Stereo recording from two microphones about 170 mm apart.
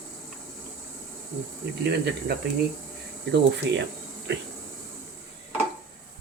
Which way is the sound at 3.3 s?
90° right.